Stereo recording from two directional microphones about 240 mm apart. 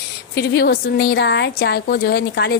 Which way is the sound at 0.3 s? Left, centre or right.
Left.